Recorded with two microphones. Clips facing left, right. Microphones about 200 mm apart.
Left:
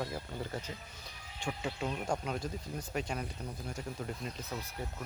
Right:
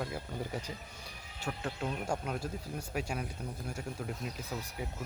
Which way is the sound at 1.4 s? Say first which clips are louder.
Even; centre (ahead or behind).